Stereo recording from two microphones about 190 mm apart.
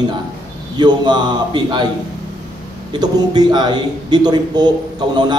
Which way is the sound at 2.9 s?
20° right (ahead or behind).